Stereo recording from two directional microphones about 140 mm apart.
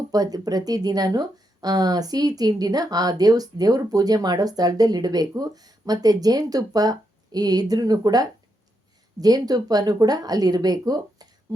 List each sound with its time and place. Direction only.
0.1 s speech: 25° right (ahead or behind)